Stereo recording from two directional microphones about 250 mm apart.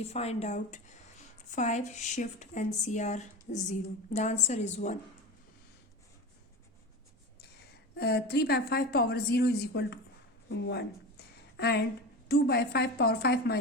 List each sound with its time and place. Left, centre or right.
0.0 s speech: left
7.9 s a woman's voice: left